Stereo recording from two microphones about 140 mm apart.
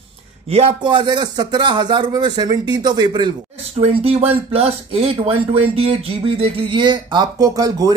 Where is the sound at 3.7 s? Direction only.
45° right (ahead or behind).